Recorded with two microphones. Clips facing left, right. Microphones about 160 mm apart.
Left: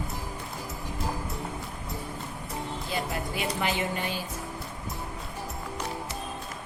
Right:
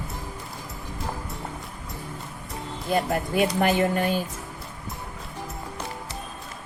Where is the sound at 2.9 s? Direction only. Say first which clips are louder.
Right 10 dB; 50° right (ahead or behind).